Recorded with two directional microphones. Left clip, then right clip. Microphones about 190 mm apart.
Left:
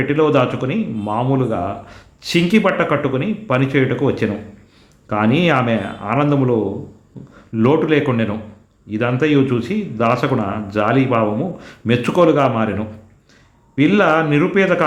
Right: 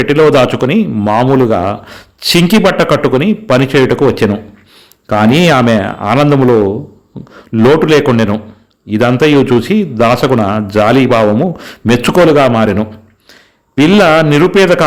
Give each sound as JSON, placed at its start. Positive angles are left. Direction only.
{"t": 0.1, "sound": "a man's voice", "side_deg": -45}